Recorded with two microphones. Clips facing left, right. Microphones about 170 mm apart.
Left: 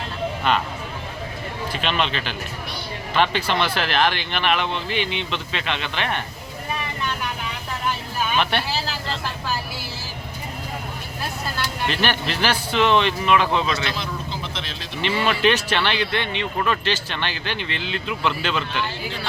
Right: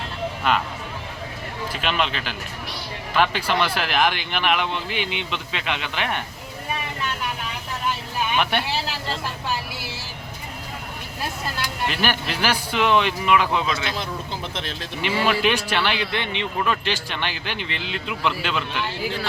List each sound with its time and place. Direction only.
0.4 s speech: 5° right (ahead or behind)
1.7 s speech: 10° right (ahead or behind)
8.4 s speech: 10° right (ahead or behind)
11.6 s speech: 10° right (ahead or behind)
14.5 s speech: 50° right (ahead or behind)
15.0 s speech: 10° right (ahead or behind)